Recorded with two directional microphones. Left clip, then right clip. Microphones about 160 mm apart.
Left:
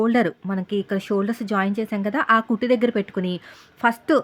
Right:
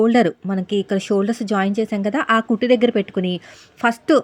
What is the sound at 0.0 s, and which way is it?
Speech, 20° right (ahead or behind).